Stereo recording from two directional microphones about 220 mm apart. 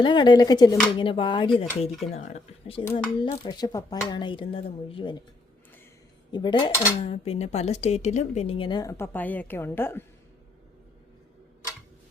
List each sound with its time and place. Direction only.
0.0 s speech: 20° left (ahead or behind)
0.9 s dishes: 20° left (ahead or behind)
6.3 s dishes: 20° left (ahead or behind)